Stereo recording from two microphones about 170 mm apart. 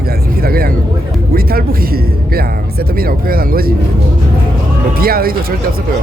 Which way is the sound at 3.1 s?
60° right (ahead or behind).